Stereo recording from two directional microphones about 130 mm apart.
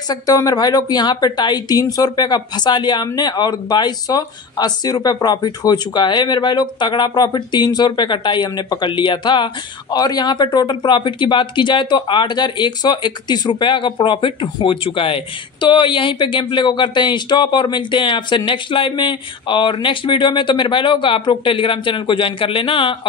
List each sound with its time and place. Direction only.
0.1 s speech: 30° left (ahead or behind)